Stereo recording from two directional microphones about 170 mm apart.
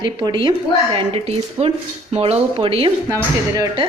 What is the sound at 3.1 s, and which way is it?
Speech, 20° right (ahead or behind).